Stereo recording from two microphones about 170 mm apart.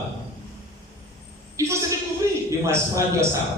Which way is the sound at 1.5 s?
20° right (ahead or behind).